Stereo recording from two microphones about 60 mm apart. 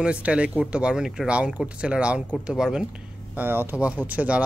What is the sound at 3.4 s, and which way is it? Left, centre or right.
Speech, right.